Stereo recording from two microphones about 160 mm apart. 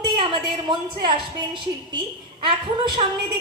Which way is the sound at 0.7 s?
30° right (ahead or behind).